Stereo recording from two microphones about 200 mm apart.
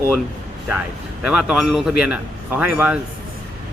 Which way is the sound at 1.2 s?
5° right (ahead or behind).